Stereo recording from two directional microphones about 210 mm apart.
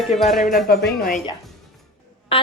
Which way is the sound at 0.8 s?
40° left (ahead or behind).